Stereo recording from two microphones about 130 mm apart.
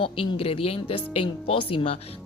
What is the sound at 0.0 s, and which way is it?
Speech, 45° left (ahead or behind).